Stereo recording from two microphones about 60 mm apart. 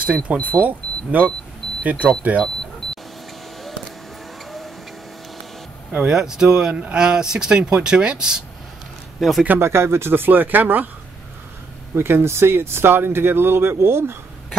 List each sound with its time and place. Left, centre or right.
0.0 s speech: right
5.9 s speech: centre
9.2 s speech: centre
9.6 s speech: right
11.9 s speech: right